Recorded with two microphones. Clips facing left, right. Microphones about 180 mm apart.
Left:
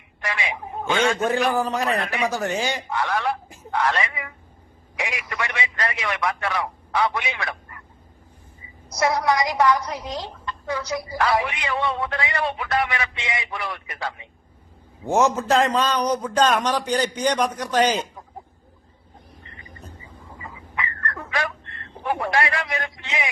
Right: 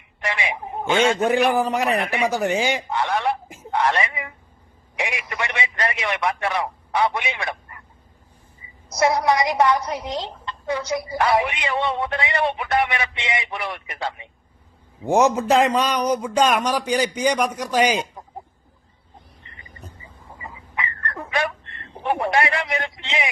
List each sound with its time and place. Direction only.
0.2 s a man's voice: 25° right (ahead or behind)
9.0 s a woman's voice: 25° right (ahead or behind)
20.4 s dog: 20° right (ahead or behind)
21.9 s a woman's voice: 25° right (ahead or behind)